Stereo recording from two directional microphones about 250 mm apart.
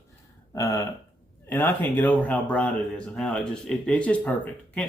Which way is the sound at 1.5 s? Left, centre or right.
Centre.